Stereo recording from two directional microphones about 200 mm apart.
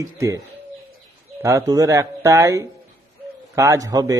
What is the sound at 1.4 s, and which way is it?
Speech, 15° right (ahead or behind).